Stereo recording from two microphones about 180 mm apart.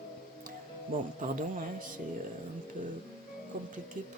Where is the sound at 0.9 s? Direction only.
45° right (ahead or behind).